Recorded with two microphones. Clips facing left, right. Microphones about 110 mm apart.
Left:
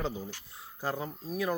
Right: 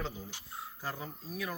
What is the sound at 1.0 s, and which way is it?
Speech, 30° left (ahead or behind).